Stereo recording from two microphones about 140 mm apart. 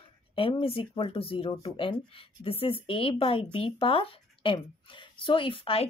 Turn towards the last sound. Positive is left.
turn(degrees=40)  # may be behind; listen again after turning